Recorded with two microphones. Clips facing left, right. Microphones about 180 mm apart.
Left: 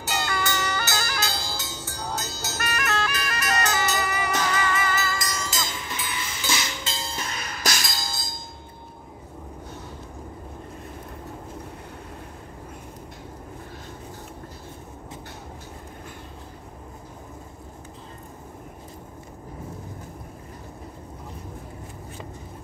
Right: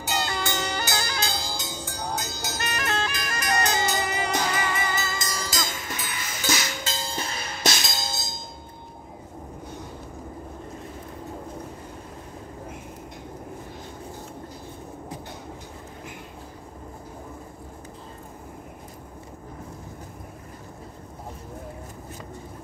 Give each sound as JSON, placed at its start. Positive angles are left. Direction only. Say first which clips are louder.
{"t": 0.0, "sound": "music", "louder": "even", "side_deg": -15}